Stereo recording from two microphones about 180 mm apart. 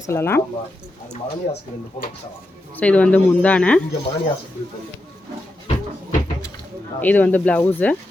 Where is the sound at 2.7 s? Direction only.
10° left (ahead or behind).